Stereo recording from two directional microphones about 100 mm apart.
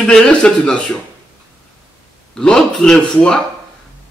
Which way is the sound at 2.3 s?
5° left (ahead or behind).